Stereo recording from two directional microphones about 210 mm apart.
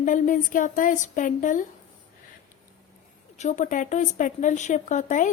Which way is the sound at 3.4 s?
35° left (ahead or behind).